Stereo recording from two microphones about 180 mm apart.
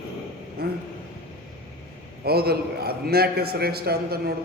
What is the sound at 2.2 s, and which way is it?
A man's voice, 60° right (ahead or behind).